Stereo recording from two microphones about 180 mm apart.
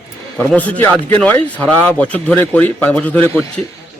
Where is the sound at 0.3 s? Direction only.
10° left (ahead or behind).